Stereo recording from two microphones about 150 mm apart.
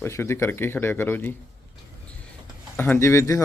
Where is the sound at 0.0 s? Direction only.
15° left (ahead or behind).